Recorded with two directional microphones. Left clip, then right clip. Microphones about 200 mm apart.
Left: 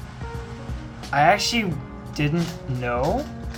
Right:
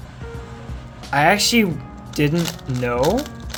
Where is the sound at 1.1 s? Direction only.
45° right (ahead or behind).